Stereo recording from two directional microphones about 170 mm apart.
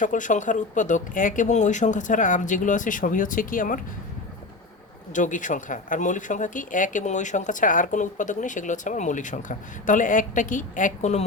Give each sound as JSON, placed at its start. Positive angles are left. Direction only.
{"t": 0.0, "sound": "speech", "side_deg": 50}
{"t": 5.1, "sound": "speech", "side_deg": 50}